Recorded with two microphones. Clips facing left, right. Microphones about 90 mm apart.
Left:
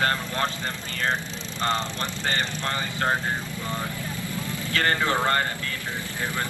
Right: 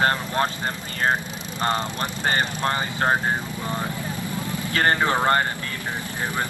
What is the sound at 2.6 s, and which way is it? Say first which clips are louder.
Speech: right 4 dB; 35° right (ahead or behind).